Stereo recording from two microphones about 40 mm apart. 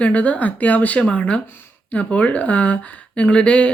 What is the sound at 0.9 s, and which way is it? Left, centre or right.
Speech, left.